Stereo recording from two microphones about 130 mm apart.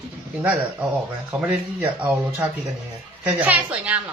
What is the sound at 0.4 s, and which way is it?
A woman's voice, 10° right (ahead or behind).